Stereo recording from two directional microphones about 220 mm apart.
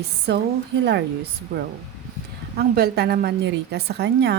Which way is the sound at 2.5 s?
45° right (ahead or behind).